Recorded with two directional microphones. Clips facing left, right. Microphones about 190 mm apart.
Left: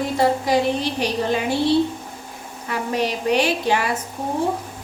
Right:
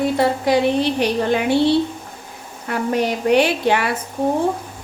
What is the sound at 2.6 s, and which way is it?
A woman's voice, 55° right (ahead or behind).